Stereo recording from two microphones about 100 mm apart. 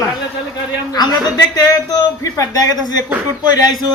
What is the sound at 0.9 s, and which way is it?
A man's voice, 40° left (ahead or behind).